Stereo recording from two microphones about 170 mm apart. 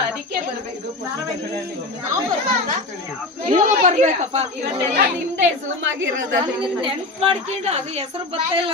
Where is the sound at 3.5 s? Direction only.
50° right (ahead or behind).